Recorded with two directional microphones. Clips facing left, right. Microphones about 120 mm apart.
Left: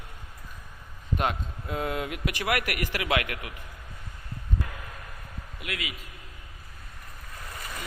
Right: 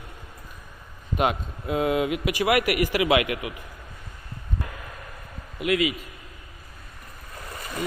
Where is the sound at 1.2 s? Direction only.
10° right (ahead or behind).